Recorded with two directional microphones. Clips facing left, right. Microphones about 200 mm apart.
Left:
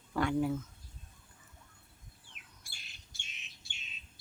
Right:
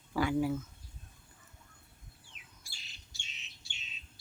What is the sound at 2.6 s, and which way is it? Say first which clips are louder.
Bird: even; 55° left (ahead or behind).